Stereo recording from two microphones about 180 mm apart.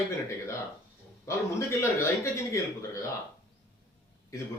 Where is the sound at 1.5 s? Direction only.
15° left (ahead or behind).